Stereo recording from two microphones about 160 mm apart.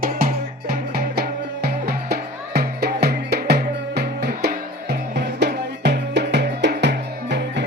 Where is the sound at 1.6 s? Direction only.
75° right (ahead or behind).